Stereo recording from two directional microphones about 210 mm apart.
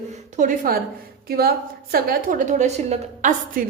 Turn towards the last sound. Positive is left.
turn(degrees=-35)  # may be behind; listen again after turning